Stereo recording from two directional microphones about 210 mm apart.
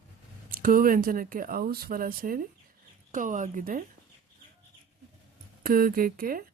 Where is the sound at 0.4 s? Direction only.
40° right (ahead or behind).